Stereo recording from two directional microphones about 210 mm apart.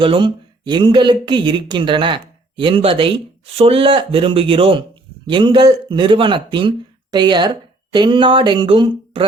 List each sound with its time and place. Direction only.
0.0 s speech: 25° right (ahead or behind)